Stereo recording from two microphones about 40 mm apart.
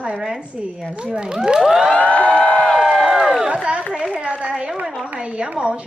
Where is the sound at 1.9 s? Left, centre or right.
Left.